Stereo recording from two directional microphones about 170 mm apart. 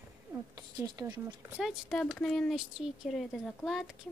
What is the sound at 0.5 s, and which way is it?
Speech, 20° right (ahead or behind).